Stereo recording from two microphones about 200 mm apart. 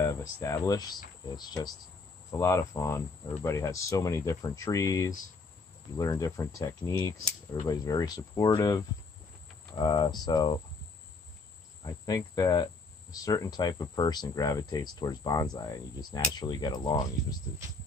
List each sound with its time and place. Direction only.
0.0 s speech: 15° left (ahead or behind)
11.8 s speech: 20° left (ahead or behind)